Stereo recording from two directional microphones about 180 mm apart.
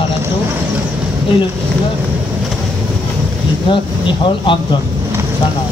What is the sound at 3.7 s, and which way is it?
Speech, 30° left (ahead or behind).